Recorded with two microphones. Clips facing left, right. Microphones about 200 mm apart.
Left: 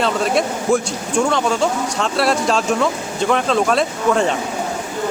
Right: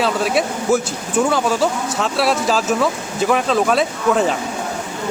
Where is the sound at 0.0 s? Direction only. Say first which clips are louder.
Even; 5° right (ahead or behind).